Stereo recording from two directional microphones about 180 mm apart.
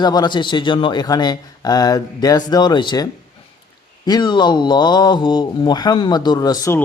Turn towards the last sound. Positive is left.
turn(degrees=20)  # may be behind; listen again after turning